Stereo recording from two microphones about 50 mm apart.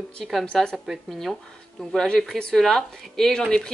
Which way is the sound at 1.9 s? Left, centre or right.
Centre.